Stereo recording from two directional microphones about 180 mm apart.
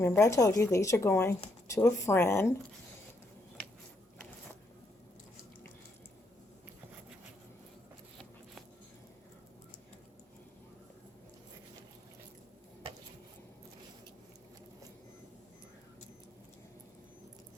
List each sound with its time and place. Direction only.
0.0 s a woman's voice: 15° left (ahead or behind)